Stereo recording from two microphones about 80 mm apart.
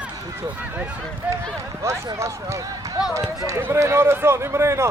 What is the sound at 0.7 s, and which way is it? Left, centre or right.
Speech, centre.